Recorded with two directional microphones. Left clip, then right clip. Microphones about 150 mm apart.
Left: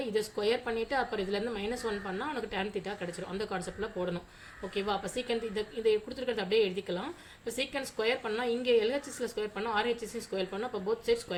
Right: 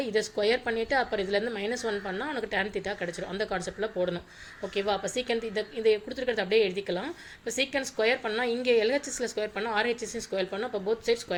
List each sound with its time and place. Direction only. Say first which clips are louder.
0.0 s a woman's voice: right 4 dB; 15° right (ahead or behind)